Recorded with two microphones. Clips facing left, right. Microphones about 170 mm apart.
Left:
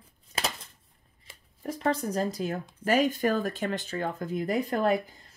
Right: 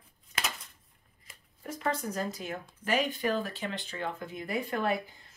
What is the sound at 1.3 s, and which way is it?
Speech, 35° left (ahead or behind).